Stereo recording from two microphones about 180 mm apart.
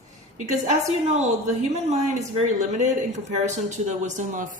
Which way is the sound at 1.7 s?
35° right (ahead or behind).